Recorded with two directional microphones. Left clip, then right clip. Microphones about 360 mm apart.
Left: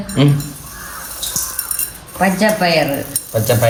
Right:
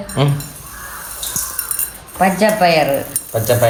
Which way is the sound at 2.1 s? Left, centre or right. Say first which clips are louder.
Right 1 dB; centre.